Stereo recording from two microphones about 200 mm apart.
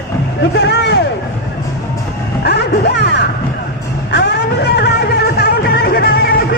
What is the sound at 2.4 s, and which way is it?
Music, 55° left (ahead or behind).